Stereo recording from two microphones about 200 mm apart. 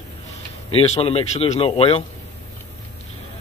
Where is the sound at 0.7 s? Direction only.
30° left (ahead or behind).